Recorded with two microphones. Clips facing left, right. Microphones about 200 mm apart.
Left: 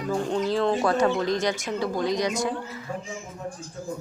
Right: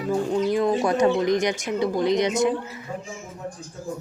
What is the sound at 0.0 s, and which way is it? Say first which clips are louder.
Speech: right 3 dB; 5° right (ahead or behind).